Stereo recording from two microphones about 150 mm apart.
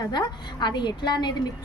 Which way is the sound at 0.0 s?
30° left (ahead or behind).